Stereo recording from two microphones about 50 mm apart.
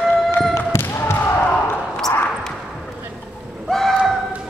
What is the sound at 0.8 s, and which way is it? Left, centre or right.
Basketball bounce, left.